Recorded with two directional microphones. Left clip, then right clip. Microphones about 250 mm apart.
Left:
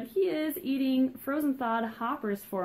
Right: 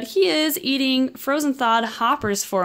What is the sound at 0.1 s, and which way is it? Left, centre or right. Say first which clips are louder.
Speech: right 10 dB; right.